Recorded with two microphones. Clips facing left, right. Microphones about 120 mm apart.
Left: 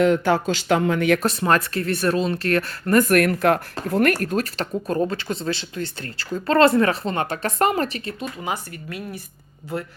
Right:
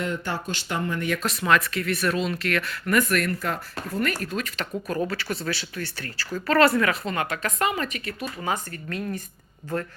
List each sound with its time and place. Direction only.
0.0 s speech: 90° left
1.2 s speech: 35° left (ahead or behind)
3.1 s speech: 65° left (ahead or behind)
4.3 s speech: 40° left (ahead or behind)
7.6 s speech: 40° left (ahead or behind)
8.0 s speech: 20° left (ahead or behind)